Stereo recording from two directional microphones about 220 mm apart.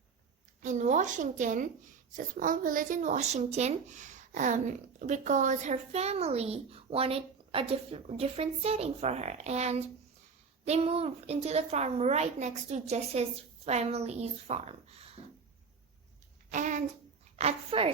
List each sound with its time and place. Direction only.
0.6 s a woman's voice: 35° right (ahead or behind)
16.5 s a sound: 35° right (ahead or behind)
17.3 s a woman's voice: 25° right (ahead or behind)